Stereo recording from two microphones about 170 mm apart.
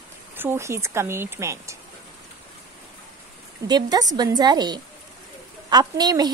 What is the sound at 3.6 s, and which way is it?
A woman's voice, 25° right (ahead or behind).